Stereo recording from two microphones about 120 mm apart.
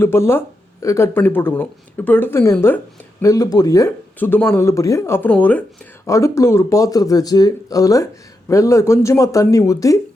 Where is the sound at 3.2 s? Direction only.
30° left (ahead or behind).